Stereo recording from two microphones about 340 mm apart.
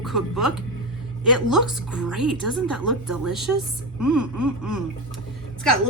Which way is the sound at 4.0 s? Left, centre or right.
Right.